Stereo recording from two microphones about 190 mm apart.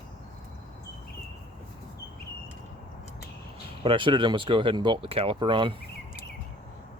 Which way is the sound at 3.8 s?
25° right (ahead or behind).